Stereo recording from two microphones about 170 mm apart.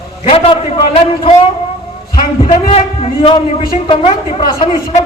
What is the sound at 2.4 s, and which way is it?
A man's voice, 40° left (ahead or behind).